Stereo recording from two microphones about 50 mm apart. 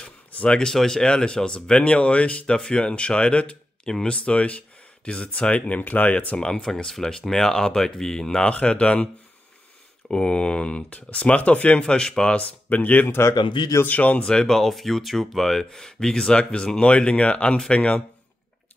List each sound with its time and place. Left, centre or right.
0.0 s speech: left
6.3 s speech: centre
11.8 s speech: centre
12.6 s speech: left
14.2 s speech: centre